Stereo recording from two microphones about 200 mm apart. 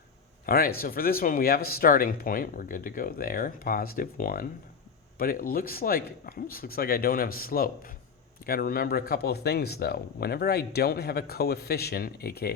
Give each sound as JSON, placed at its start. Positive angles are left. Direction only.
{"t": 0.4, "sound": "speech", "side_deg": 45}